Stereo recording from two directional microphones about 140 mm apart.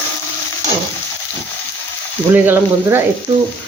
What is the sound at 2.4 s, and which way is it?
Speech, 15° right (ahead or behind).